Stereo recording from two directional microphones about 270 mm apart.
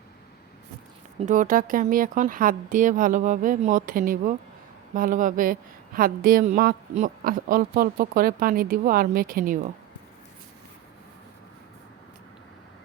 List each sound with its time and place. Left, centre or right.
1.2 s a woman's voice: right